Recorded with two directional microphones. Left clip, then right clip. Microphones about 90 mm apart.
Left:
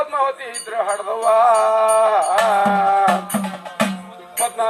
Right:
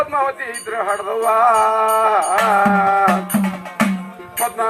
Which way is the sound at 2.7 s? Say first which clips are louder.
Right 1 dB; 35° left (ahead or behind).